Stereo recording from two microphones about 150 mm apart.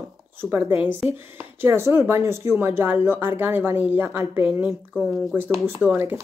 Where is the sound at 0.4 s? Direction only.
15° right (ahead or behind).